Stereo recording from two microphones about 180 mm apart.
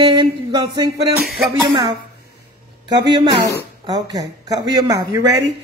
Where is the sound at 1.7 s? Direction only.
25° right (ahead or behind).